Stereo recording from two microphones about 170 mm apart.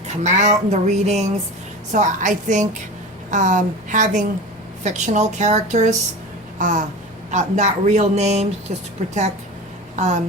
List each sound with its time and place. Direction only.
0.1 s a woman's voice: 40° right (ahead or behind)
0.7 s a sound: 40° right (ahead or behind)
1.9 s speech: 45° right (ahead or behind)
9.9 s speech: 45° right (ahead or behind)